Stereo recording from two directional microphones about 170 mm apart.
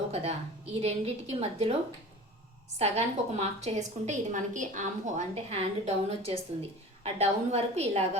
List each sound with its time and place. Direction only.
0.1 s a woman's voice: 40° right (ahead or behind)
2.7 s a woman's voice: 40° right (ahead or behind)